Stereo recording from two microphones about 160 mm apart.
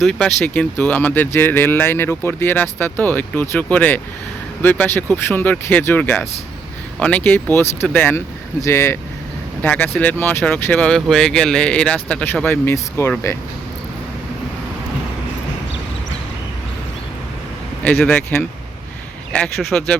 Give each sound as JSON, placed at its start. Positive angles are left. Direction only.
{"t": 0.0, "sound": "speech", "side_deg": 5}
{"t": 17.8, "sound": "speech", "side_deg": 5}